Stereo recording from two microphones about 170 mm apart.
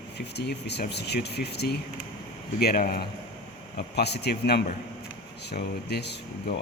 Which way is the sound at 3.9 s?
75° left (ahead or behind).